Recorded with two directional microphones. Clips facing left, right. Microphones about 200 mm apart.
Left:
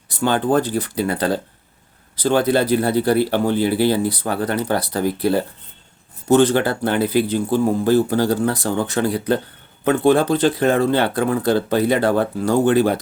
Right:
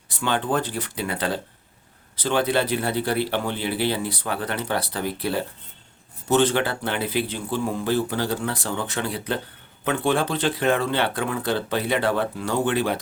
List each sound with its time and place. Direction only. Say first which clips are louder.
0.1 s speech: left 6 dB; 40° left (ahead or behind)